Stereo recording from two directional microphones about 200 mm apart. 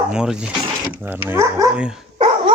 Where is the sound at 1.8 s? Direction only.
5° right (ahead or behind).